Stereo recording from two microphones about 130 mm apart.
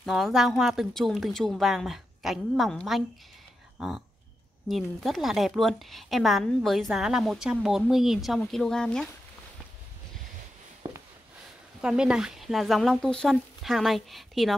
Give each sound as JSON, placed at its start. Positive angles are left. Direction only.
{"t": 0.0, "sound": "a woman's voice", "side_deg": 0}
{"t": 10.8, "sound": "a sound", "side_deg": -30}
{"t": 11.8, "sound": "a woman's voice", "side_deg": -5}